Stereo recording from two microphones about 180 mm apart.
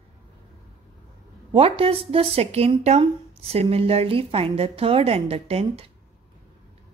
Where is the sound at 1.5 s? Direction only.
30° right (ahead or behind).